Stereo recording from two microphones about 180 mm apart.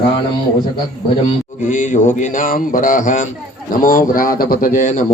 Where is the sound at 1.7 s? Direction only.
45° left (ahead or behind).